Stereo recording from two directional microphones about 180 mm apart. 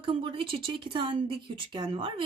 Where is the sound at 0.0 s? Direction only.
30° right (ahead or behind).